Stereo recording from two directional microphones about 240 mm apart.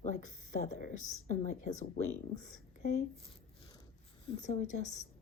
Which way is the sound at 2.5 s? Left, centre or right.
Left.